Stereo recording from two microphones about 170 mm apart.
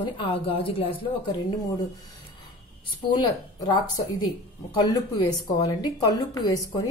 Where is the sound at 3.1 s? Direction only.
25° left (ahead or behind).